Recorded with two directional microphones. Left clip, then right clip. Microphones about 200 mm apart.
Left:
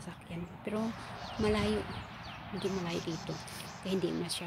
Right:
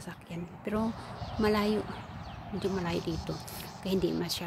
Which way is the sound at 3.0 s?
35° right (ahead or behind).